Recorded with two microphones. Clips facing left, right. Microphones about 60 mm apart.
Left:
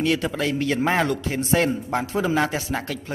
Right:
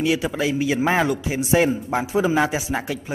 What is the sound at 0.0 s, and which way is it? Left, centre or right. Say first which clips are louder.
Speech: right 1 dB; centre.